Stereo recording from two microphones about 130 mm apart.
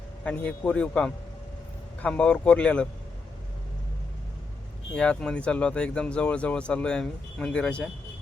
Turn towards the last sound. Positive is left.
turn(degrees=10)  # may be behind; listen again after turning